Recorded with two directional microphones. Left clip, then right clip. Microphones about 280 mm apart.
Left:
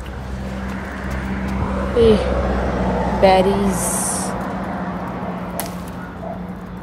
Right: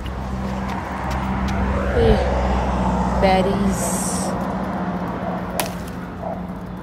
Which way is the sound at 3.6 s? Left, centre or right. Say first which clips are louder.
Left 1 dB; centre.